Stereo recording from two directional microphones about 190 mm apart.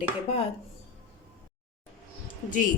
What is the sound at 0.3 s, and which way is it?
Speech, 30° left (ahead or behind).